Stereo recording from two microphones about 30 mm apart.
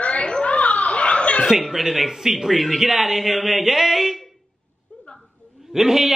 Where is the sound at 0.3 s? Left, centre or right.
Left.